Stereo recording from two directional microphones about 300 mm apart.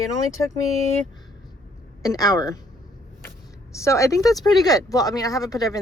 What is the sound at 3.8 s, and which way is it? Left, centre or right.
Speech, centre.